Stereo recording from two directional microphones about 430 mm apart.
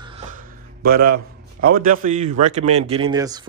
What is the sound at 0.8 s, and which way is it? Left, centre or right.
A man's voice, right.